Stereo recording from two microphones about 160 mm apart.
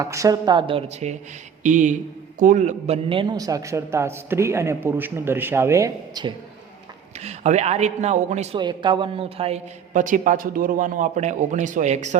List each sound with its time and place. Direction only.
0.0 s speech: 20° right (ahead or behind); by 1.1 s 40° right (ahead or behind)
1.6 s a man's voice: 50° right (ahead or behind); by 6.3 s 20° right (ahead or behind)
7.2 s a man's voice: 45° right (ahead or behind)
8.5 s a woman's voice: 30° right (ahead or behind)
9.9 s a man's voice: 55° right (ahead or behind)